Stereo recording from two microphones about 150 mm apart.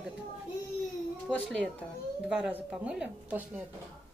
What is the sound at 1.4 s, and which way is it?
Speech, 5° left (ahead or behind).